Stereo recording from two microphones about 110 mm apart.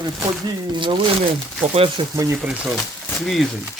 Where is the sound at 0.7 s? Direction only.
50° right (ahead or behind).